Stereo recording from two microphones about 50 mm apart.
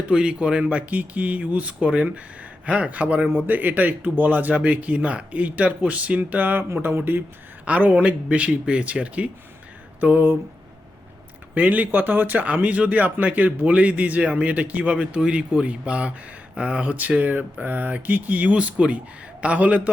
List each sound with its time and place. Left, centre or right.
0.1 s speech: centre; by 6.7 s right
7.6 s speech: right
10.0 s speech: right
11.5 s speech: right